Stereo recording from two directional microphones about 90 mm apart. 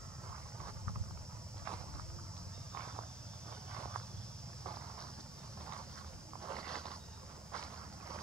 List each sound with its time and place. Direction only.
2.7 s walk: 30° right (ahead or behind)
6.4 s a sound: 35° right (ahead or behind)
7.5 s walk: 35° right (ahead or behind)